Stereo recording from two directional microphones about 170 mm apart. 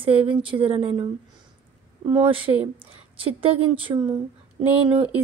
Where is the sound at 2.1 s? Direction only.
30° right (ahead or behind).